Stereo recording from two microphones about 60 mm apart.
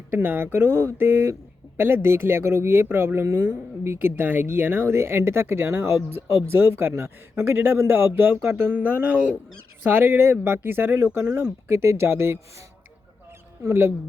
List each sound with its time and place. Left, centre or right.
0.1 s a man's voice: right
8.4 s speech: right
8.7 s speech: right
9.8 s a man's voice: right
11.7 s speech: right
13.7 s speech: right